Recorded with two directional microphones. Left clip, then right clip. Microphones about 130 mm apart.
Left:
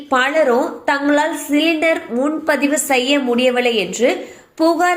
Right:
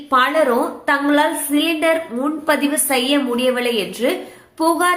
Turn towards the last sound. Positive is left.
turn(degrees=30)  # may be behind; listen again after turning